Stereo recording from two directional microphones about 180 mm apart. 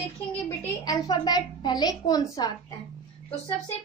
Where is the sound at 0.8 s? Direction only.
20° left (ahead or behind).